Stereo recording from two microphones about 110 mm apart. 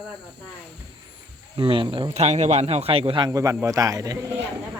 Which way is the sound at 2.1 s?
85° right.